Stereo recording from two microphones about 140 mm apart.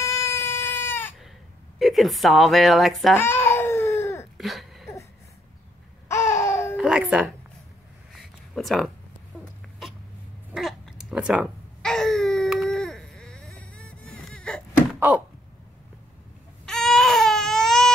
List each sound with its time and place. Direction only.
0.0 s sheep: 20° left (ahead or behind)
1.8 s a woman's voice: centre (ahead or behind)
3.2 s baby cry: 20° left (ahead or behind)
4.4 s a sound: centre (ahead or behind)
6.0 s laughter: 20° left (ahead or behind)
6.8 s doorbell: 5° right (ahead or behind)
8.1 s a sound: centre (ahead or behind)
11.8 s baby cry: 5° left (ahead or behind)
15.0 s a sound: 10° right (ahead or behind)
16.6 s baby cry: 5° left (ahead or behind)